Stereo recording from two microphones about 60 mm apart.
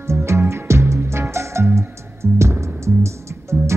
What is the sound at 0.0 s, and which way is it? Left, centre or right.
Music, right.